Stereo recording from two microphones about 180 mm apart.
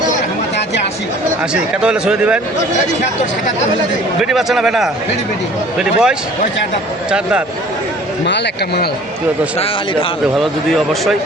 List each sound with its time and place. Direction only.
1.8 s a man's voice: 5° right (ahead or behind)
4.2 s a man's voice: centre (ahead or behind)
8.3 s a man's voice: 65° left (ahead or behind)
9.6 s a man's voice: 30° left (ahead or behind)